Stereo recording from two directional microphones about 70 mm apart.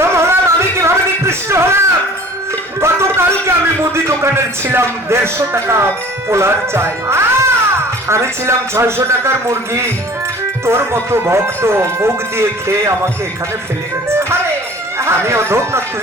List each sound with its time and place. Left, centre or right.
0.0 s music: right
0.8 s a sound: right
2.8 s a sound: right
3.9 s a man's voice: right
14.1 s music: right
14.9 s speech: right